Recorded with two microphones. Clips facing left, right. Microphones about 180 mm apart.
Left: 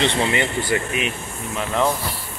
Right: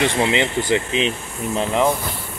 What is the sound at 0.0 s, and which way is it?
Speech, 15° right (ahead or behind).